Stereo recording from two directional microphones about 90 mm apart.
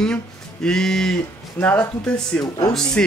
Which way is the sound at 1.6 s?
20° left (ahead or behind).